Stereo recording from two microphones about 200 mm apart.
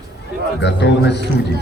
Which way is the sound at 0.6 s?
60° left (ahead or behind).